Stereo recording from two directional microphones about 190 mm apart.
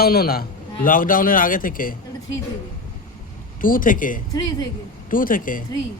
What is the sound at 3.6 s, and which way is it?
A man's voice, 45° left (ahead or behind).